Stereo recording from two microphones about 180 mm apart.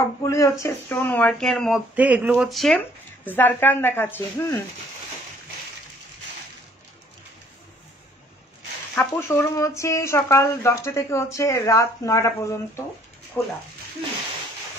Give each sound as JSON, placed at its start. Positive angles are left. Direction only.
{"t": 0.2, "sound": "speech", "side_deg": 20}
{"t": 2.0, "sound": "speech", "side_deg": -10}
{"t": 3.3, "sound": "speech", "side_deg": 10}
{"t": 8.9, "sound": "speech", "side_deg": 10}